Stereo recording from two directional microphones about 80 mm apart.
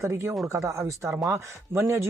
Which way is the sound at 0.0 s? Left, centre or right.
Right.